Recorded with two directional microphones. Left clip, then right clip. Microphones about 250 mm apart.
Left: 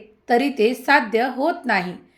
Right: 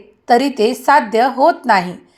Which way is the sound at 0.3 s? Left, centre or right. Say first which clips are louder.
Right 5 dB; centre.